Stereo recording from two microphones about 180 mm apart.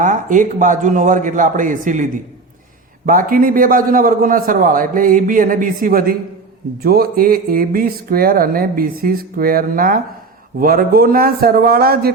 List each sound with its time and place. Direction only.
0.0 s speech: 45° right (ahead or behind)
3.1 s a man's voice: 50° right (ahead or behind)